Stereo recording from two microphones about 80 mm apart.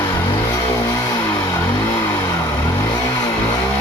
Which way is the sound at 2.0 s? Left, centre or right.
Left.